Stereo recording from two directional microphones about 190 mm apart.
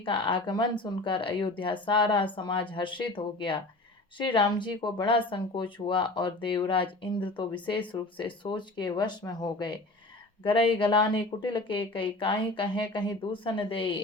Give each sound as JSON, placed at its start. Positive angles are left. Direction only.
{"t": 0.0, "sound": "speech", "side_deg": 25}